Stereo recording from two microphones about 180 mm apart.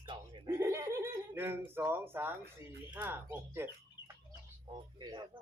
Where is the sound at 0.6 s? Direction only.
15° right (ahead or behind).